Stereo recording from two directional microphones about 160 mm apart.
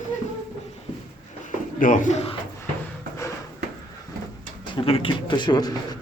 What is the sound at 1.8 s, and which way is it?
Speech, 55° left (ahead or behind).